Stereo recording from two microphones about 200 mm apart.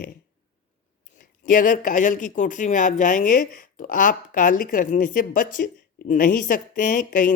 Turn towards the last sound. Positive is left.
turn(degrees=40)  # may be behind; listen again after turning